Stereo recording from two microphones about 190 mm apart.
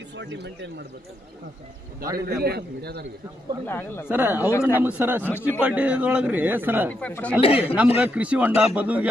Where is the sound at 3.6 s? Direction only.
10° left (ahead or behind).